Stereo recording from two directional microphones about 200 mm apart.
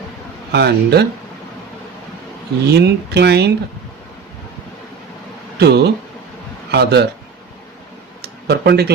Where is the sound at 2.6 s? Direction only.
55° right (ahead or behind).